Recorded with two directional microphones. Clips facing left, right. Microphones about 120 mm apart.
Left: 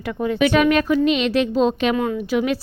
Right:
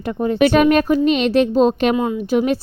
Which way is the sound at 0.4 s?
40° right (ahead or behind).